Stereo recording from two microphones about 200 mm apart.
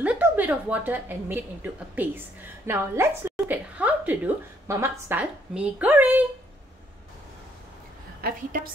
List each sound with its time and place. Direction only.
0.0 s a woman's voice: 5° right (ahead or behind)
8.2 s a woman's voice: 45° right (ahead or behind)